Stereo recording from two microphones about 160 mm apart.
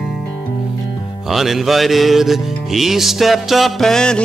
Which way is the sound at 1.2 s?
Centre (ahead or behind).